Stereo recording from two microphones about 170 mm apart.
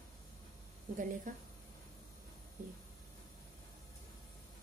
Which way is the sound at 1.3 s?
50° right (ahead or behind).